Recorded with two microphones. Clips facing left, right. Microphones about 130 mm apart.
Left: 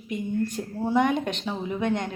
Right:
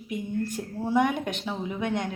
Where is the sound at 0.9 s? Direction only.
10° right (ahead or behind).